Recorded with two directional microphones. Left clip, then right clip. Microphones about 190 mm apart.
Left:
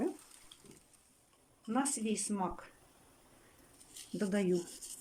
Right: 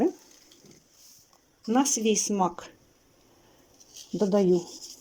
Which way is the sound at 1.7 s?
50° right (ahead or behind).